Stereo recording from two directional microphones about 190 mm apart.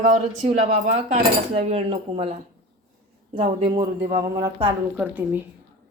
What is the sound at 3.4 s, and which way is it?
Speech, 30° right (ahead or behind).